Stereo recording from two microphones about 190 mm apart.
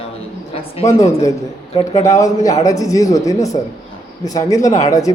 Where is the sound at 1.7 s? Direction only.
20° left (ahead or behind).